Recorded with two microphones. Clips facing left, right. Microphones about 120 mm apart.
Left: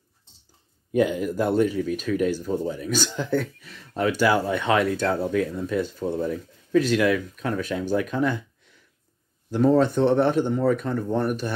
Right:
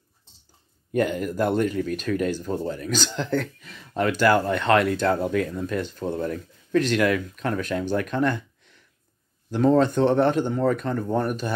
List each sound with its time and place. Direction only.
0.9 s speech: 5° left (ahead or behind)